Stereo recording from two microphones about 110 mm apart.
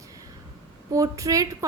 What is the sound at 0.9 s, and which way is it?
Speech, 30° right (ahead or behind).